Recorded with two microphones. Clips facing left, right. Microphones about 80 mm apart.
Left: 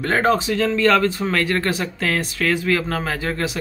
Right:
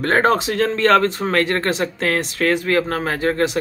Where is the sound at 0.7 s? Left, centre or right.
Right.